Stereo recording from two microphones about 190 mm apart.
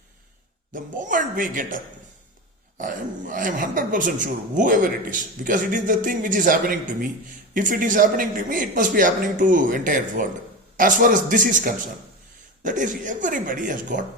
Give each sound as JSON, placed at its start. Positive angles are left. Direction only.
{"t": 0.7, "sound": "speech", "side_deg": -45}